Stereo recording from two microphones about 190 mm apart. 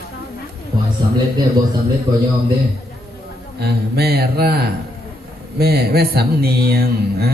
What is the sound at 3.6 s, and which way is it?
Speech, 55° right (ahead or behind).